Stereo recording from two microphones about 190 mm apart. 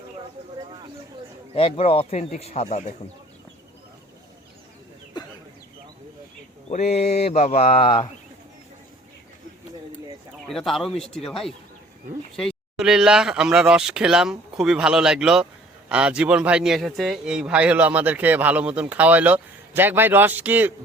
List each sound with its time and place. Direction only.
1.5 s speech: 30° left (ahead or behind)
5.2 s a sound: 20° left (ahead or behind)
6.9 s speech: 35° left (ahead or behind)
10.5 s a man's voice: centre (ahead or behind)